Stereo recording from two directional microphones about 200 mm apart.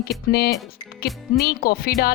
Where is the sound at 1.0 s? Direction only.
50° left (ahead or behind).